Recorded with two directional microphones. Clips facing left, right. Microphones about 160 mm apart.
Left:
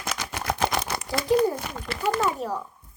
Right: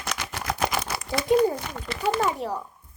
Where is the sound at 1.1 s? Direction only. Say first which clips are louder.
Right 1 dB; 25° right (ahead or behind).